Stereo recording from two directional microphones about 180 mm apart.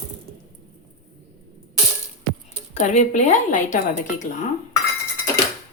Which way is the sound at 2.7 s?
40° left (ahead or behind).